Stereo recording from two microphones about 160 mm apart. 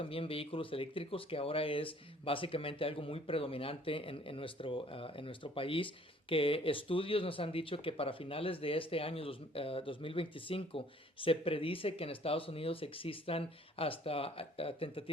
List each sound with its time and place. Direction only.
0.0 s speech: 35° left (ahead or behind)